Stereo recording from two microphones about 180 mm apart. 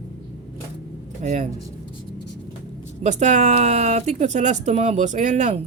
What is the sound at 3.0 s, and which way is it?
Speech, 40° right (ahead or behind).